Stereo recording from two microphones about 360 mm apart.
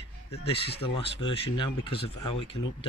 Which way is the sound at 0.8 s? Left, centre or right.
Centre.